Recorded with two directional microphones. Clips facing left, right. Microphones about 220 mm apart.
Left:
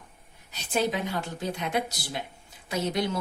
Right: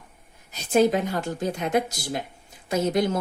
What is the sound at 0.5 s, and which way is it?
A woman's voice, 45° right (ahead or behind).